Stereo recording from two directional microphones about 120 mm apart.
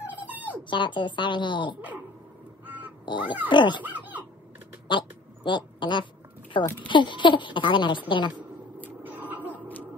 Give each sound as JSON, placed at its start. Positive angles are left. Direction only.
{"t": 0.0, "sound": "dog", "side_deg": -15}
{"t": 0.7, "sound": "a woman's voice", "side_deg": 40}
{"t": 2.6, "sound": "crow", "side_deg": -15}
{"t": 3.1, "sound": "a woman's voice", "side_deg": 40}
{"t": 3.8, "sound": "speech", "side_deg": -15}
{"t": 4.8, "sound": "a sound", "side_deg": 40}
{"t": 5.8, "sound": "a woman's voice", "side_deg": 40}
{"t": 8.7, "sound": "a sound", "side_deg": -15}
{"t": 9.5, "sound": "music", "side_deg": 15}